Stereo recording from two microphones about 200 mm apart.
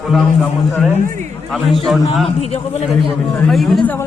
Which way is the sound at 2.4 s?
30° left (ahead or behind).